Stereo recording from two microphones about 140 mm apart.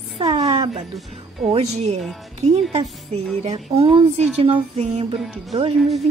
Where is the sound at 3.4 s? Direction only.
45° right (ahead or behind).